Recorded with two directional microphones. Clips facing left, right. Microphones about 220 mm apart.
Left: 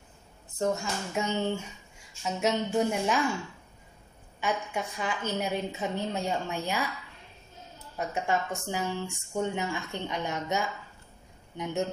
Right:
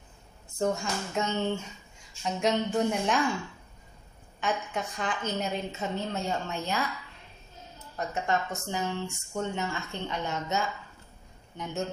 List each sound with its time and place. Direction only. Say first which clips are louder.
0.6 s a woman's voice: even; 5° left (ahead or behind)
4.4 s speech: even; 10° left (ahead or behind)
7.9 s speech: even; 10° left (ahead or behind)